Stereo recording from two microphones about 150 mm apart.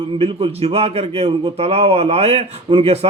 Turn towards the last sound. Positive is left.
turn(degrees=-45)  # may be behind; listen again after turning